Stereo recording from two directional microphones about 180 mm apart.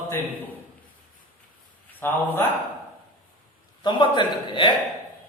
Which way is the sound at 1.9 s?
10° left (ahead or behind).